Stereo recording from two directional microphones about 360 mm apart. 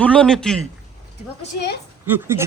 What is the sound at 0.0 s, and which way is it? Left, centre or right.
Speech, centre.